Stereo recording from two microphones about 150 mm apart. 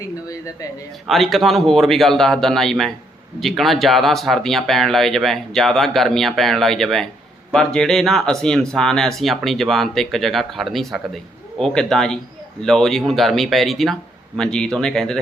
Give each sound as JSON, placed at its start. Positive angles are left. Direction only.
{"t": 0.3, "sound": "speech", "side_deg": 20}
{"t": 1.0, "sound": "speech", "side_deg": 0}